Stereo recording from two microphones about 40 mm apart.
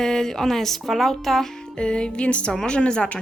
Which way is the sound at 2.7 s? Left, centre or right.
Left.